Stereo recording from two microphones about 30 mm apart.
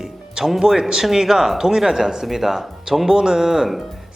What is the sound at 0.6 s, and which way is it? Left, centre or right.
Speech, centre.